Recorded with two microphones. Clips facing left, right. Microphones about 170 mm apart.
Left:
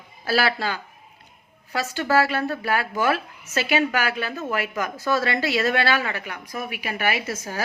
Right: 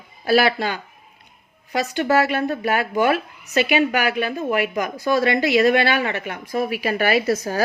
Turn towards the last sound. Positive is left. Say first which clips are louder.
# right 9 dB
turn(degrees=-35)  # may be behind; listen again after turning